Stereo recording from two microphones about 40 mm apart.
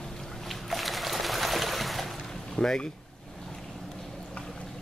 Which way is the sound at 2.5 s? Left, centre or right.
Centre.